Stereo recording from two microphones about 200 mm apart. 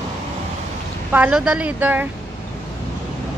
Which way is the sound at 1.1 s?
5° right (ahead or behind).